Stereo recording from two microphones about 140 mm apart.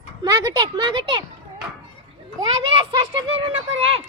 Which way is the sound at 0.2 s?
30° right (ahead or behind).